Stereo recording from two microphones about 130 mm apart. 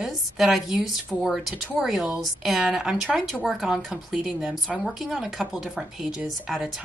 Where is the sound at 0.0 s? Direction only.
Centre (ahead or behind).